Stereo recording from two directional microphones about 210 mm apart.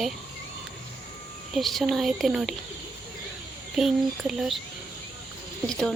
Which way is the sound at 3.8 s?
Centre (ahead or behind).